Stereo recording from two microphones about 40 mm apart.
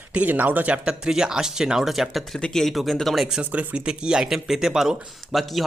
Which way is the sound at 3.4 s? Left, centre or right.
Right.